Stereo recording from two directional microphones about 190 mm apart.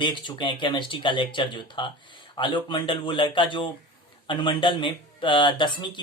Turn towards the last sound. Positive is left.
turn(degrees=25)  # may be behind; listen again after turning